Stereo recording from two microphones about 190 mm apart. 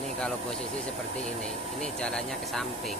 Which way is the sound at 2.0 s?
5° left (ahead or behind).